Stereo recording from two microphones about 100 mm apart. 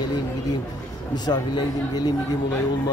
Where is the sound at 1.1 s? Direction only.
45° left (ahead or behind).